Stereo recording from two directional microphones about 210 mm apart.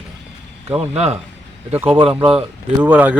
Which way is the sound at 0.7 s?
30° right (ahead or behind).